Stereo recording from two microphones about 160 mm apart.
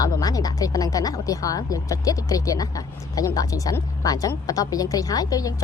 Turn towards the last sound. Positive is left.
turn(degrees=20)  # may be behind; listen again after turning